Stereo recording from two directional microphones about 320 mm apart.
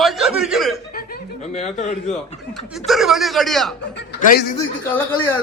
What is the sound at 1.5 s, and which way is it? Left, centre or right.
Speech, left.